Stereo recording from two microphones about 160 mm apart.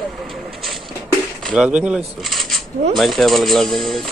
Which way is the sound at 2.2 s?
Centre (ahead or behind).